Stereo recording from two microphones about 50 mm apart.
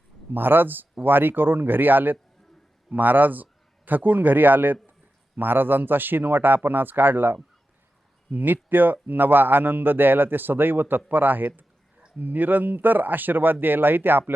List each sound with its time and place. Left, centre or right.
0.3 s a man's voice: right